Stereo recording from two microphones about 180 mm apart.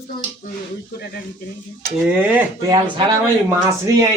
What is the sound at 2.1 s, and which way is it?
Speech, 10° right (ahead or behind).